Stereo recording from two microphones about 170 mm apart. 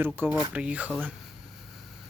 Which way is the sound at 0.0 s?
10° right (ahead or behind).